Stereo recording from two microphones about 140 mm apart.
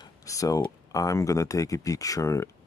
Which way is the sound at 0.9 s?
25° left (ahead or behind).